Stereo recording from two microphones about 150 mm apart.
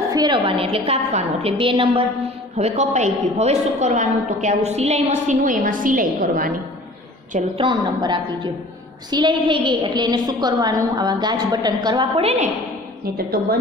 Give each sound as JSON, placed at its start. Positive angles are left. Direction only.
{"t": 0.1, "sound": "a woman's voice", "side_deg": -30}
{"t": 2.5, "sound": "a woman's voice", "side_deg": -50}
{"t": 7.3, "sound": "a woman's voice", "side_deg": -35}
{"t": 13.0, "sound": "a woman's voice", "side_deg": -90}